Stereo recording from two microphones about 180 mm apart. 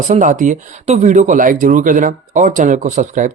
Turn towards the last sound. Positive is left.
turn(degrees=-45)  # may be behind; listen again after turning